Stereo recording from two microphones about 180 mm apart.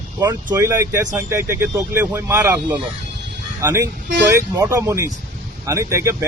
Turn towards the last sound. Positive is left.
turn(degrees=-15)  # may be behind; listen again after turning